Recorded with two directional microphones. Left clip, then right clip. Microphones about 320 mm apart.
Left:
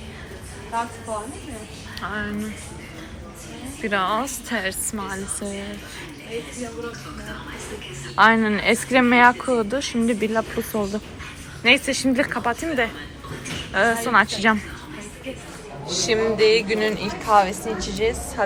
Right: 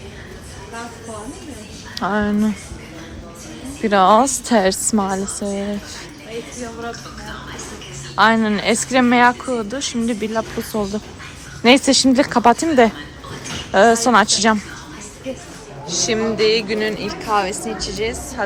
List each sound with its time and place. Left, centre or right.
2.0 s a woman's voice: centre
3.8 s a woman's voice: centre
8.1 s a woman's voice: centre
15.9 s a woman's voice: centre